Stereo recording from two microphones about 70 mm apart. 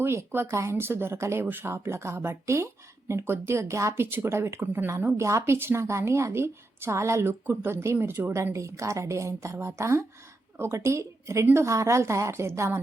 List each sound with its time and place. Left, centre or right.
0.0 s a woman's voice: right
5.1 s a woman's voice: right